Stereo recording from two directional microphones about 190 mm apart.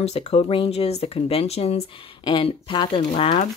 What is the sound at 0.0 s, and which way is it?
Speech, 35° left (ahead or behind).